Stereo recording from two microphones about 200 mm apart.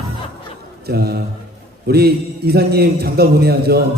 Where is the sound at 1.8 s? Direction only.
50° right (ahead or behind).